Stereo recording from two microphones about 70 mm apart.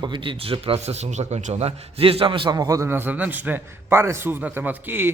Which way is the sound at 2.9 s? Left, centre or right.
Right.